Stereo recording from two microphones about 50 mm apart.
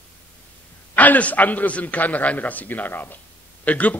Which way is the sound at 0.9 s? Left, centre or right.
Left.